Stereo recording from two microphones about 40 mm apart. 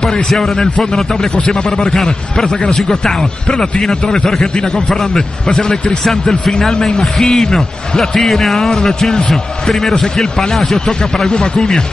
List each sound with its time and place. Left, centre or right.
0.0 s a man's voice: centre
1.4 s a man's voice: left
2.0 s a man's voice: centre
11.2 s a man's voice: centre